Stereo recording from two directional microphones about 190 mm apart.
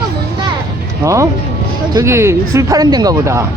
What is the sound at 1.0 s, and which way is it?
Speech, 15° right (ahead or behind).